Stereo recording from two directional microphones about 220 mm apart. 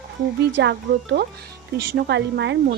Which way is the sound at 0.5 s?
50° right (ahead or behind).